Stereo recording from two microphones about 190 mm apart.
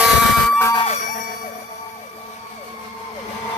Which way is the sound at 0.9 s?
40° left (ahead or behind).